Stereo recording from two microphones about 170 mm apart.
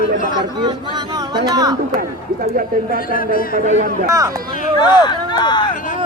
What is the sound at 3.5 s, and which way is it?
Speech, 50° right (ahead or behind).